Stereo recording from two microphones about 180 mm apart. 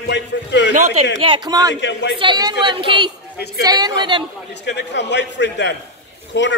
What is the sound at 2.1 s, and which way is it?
Speech, 25° right (ahead or behind).